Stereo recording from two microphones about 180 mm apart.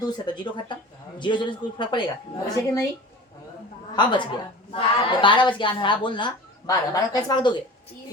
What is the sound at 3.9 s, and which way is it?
A woman's voice, 25° left (ahead or behind).